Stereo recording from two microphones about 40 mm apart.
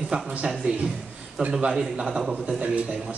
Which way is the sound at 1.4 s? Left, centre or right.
Right.